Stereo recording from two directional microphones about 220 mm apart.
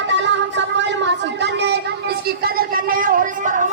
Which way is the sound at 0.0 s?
55° right (ahead or behind).